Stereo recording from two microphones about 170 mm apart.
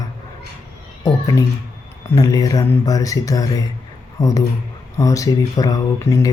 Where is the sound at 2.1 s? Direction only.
20° left (ahead or behind).